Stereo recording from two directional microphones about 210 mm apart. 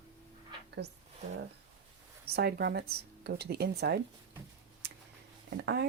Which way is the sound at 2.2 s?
50° right (ahead or behind).